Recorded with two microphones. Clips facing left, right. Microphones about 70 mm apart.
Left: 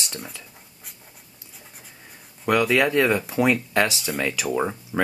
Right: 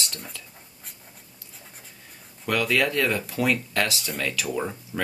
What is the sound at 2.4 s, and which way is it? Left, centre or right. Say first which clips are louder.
Speech: left 4 dB; centre.